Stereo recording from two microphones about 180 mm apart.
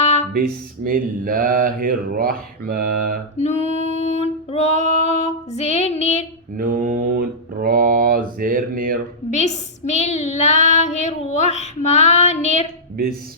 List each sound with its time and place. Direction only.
0.0 s a sound: 40° left (ahead or behind)
0.3 s mantra: 55° right (ahead or behind)
3.3 s child singing: 40° left (ahead or behind)
6.6 s mantra: 50° right (ahead or behind)
9.3 s child singing: 40° left (ahead or behind)